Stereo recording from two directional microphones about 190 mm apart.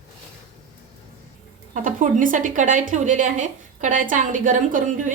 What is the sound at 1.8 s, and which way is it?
A woman's voice, 45° right (ahead or behind).